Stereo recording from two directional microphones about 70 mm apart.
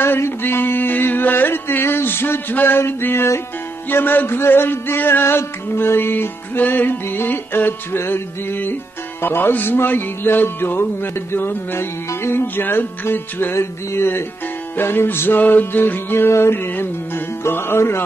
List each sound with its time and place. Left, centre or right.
0.0 s music: left